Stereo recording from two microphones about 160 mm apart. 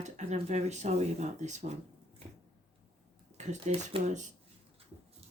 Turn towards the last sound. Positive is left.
turn(degrees=-45)  # may be behind; listen again after turning